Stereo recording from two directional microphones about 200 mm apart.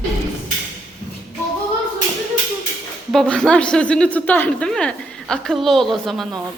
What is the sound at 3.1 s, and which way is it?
Speech, centre (ahead or behind).